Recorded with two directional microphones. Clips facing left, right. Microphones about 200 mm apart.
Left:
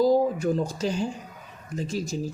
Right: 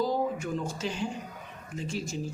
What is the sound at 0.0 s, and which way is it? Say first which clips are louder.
Speech: left 8 dB; 40° left (ahead or behind).